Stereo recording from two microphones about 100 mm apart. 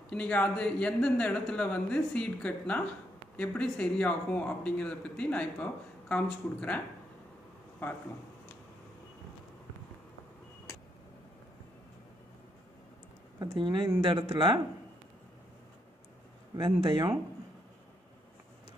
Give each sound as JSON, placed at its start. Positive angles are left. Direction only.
{"t": 0.1, "sound": "a man's voice", "side_deg": 10}
{"t": 13.4, "sound": "speech", "side_deg": -50}
{"t": 16.5, "sound": "speech", "side_deg": -50}